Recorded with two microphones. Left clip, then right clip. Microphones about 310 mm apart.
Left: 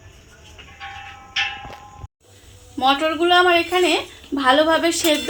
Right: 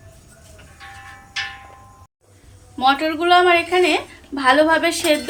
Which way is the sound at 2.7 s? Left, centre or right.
Left.